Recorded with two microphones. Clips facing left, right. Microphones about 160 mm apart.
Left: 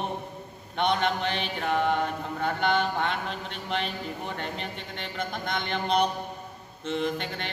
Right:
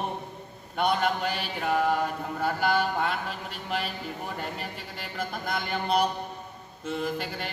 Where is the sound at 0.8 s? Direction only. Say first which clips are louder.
Even; 5° right (ahead or behind).